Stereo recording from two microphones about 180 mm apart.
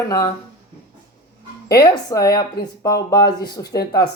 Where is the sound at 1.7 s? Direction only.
20° left (ahead or behind).